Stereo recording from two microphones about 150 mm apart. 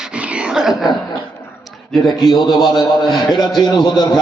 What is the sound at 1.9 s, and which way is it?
Speech, centre (ahead or behind).